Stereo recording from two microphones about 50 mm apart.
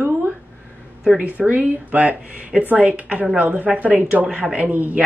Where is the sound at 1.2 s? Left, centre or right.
Right.